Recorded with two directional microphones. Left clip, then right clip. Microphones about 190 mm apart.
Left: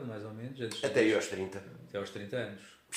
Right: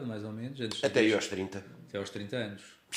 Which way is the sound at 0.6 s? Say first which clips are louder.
Right 1 dB; 35° right (ahead or behind).